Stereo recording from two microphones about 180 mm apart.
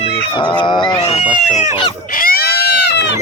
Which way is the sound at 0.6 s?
25° left (ahead or behind).